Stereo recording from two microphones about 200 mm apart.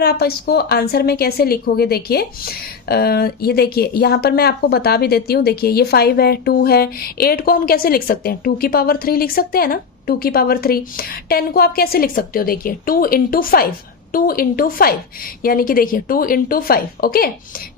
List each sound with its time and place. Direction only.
0.0 s speech: 50° left (ahead or behind)